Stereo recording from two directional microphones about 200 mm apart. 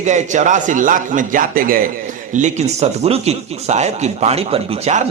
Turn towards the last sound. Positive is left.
turn(degrees=-30)  # may be behind; listen again after turning